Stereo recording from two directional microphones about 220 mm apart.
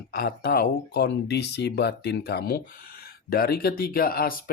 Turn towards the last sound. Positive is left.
turn(degrees=40)  # may be behind; listen again after turning